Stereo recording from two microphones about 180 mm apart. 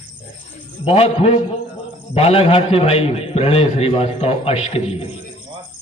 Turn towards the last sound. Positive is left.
turn(degrees=30)  # may be behind; listen again after turning